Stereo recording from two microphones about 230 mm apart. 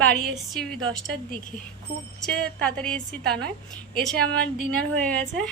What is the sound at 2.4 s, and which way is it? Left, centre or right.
A woman's voice, centre.